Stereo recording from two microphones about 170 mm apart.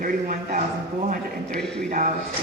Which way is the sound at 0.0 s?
50° right (ahead or behind).